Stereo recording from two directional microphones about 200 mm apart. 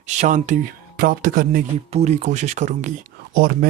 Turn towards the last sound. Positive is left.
turn(degrees=-50)  # may be behind; listen again after turning